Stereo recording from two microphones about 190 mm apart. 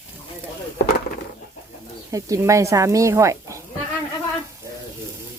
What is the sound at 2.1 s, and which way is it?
Speech, 15° right (ahead or behind).